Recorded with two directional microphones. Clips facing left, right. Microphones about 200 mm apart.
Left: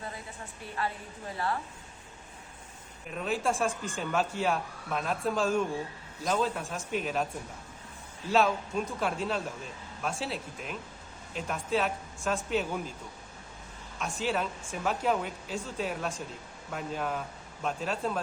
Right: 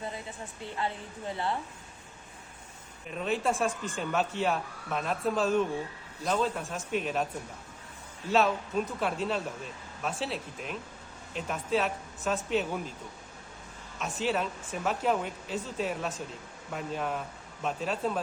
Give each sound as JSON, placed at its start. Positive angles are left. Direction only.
{"t": 0.6, "sound": "a woman's voice", "side_deg": -25}
{"t": 3.1, "sound": "speech", "side_deg": 0}
{"t": 8.3, "sound": "speech", "side_deg": 0}
{"t": 14.0, "sound": "speech", "side_deg": 0}